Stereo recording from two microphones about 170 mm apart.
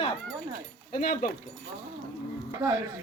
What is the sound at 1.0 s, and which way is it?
Speech, 55° left (ahead or behind).